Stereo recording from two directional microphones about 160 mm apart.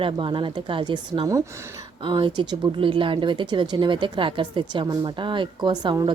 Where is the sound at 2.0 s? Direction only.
30° right (ahead or behind).